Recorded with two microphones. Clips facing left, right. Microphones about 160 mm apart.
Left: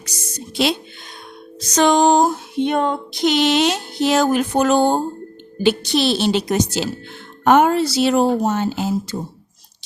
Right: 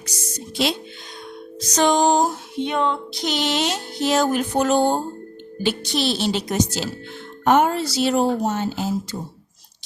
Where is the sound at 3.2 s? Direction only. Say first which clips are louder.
Left 7 dB; 70° left (ahead or behind); by 4.7 s 85° left.